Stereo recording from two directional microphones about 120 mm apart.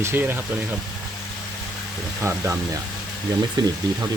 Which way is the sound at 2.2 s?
20° right (ahead or behind).